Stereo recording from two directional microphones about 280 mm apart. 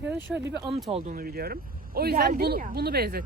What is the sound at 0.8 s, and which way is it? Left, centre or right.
Speech, right.